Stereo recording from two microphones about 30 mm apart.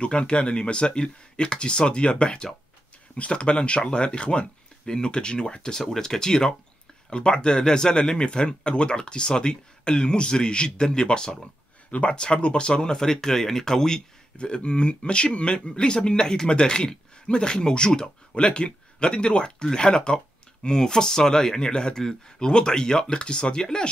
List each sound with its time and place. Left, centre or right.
0.0 s speech: left
12.9 s speech: centre
14.4 s speech: left
18.3 s speech: left